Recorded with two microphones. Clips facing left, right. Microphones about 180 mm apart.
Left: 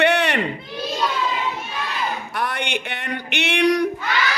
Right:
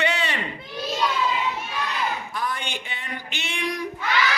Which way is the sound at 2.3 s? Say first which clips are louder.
Left 4 dB; 70° left (ahead or behind).